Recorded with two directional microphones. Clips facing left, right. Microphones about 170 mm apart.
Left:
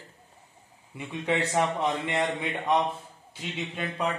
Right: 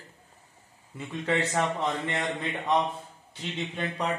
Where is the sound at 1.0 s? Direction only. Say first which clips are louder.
Even; 15° left (ahead or behind).